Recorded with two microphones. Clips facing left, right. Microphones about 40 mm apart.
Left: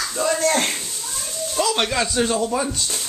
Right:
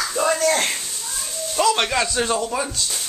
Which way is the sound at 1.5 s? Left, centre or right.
Centre.